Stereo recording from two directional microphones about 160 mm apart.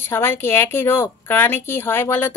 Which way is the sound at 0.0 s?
15° left (ahead or behind).